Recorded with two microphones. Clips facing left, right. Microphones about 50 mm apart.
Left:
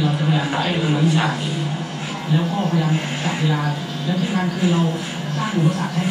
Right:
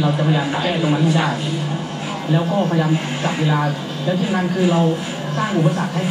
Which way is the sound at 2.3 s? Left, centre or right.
Centre.